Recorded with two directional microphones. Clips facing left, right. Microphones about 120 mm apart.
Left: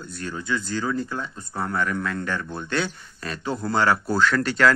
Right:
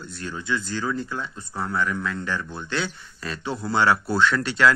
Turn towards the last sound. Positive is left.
turn(degrees=45)  # may be behind; listen again after turning